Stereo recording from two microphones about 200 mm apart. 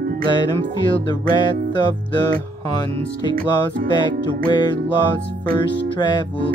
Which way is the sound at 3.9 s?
25° left (ahead or behind).